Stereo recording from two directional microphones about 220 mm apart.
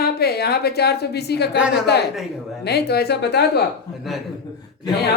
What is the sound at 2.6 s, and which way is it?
A woman's voice, 45° left (ahead or behind).